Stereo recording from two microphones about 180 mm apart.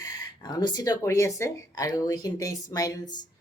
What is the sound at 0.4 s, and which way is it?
A woman's voice, 25° left (ahead or behind).